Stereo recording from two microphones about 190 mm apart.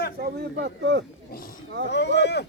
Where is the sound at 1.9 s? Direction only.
65° left (ahead or behind).